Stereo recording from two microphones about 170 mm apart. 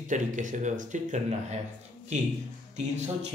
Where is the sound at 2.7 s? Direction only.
40° right (ahead or behind).